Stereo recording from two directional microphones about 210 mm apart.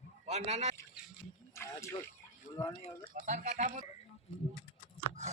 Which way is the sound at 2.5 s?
15° left (ahead or behind).